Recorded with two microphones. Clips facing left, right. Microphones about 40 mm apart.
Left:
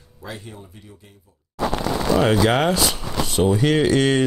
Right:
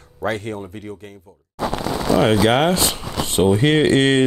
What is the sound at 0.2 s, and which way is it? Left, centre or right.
Speech, right.